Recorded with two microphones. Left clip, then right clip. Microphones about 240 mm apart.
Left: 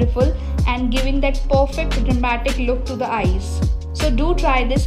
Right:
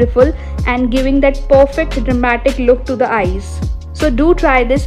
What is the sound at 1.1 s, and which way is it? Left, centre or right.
A woman's voice, centre.